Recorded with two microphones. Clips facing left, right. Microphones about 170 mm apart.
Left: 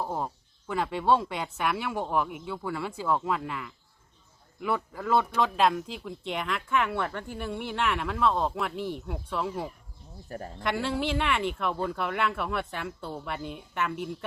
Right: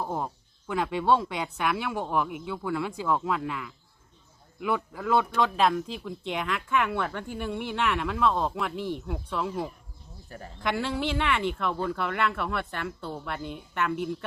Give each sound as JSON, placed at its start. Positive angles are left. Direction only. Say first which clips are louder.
{"t": 0.0, "sound": "a sound", "louder": "even", "side_deg": 5}
{"t": 0.7, "sound": "speech", "louder": "right 1 dB", "side_deg": 0}
{"t": 10.2, "sound": "speech", "louder": "left 5 dB", "side_deg": 40}
{"t": 10.6, "sound": "speech", "louder": "right 1 dB", "side_deg": 5}